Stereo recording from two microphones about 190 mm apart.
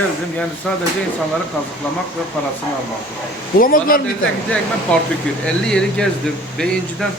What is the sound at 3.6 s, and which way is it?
Speech, 50° left (ahead or behind).